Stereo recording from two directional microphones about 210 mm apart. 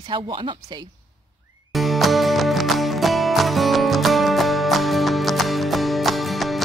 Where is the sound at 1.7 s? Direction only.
Centre (ahead or behind).